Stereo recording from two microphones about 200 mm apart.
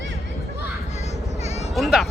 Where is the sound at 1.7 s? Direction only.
Centre (ahead or behind).